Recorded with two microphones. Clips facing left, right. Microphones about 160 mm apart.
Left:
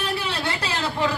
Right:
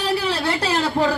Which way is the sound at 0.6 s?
35° right (ahead or behind).